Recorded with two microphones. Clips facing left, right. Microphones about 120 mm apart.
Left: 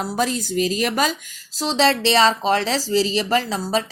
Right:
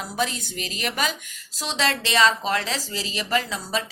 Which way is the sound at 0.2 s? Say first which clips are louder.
Left 6 dB; 40° left (ahead or behind).